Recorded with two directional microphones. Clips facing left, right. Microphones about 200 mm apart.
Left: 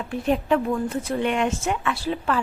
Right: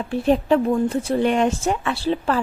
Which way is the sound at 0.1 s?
30° right (ahead or behind).